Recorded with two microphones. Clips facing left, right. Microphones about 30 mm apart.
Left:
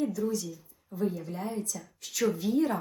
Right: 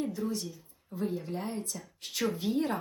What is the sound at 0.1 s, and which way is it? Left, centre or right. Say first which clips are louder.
Speech: left 3 dB; right.